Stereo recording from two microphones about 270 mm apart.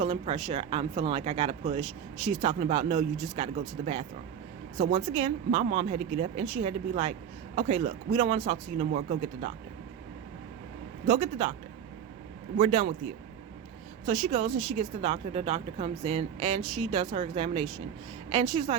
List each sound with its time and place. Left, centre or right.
0.0 s speech: right
11.0 s speech: right
12.5 s speech: right
14.0 s speech: right